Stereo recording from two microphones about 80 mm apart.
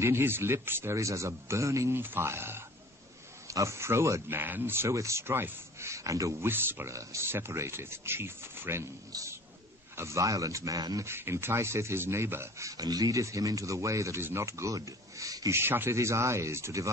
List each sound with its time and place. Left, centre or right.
0.0 s speech: right
0.9 s speech: right
2.0 s speech: right
6.5 s speech: right
6.9 s speech: right
9.1 s speech: right
9.9 s speech: right
11.1 s speech: right
14.8 s a sound: right
15.5 s speech: right